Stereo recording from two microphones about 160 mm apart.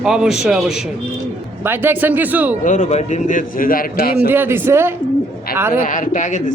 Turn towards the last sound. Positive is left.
turn(degrees=50)  # may be behind; listen again after turning